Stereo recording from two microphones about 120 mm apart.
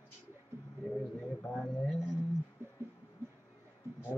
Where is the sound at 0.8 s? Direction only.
Centre (ahead or behind).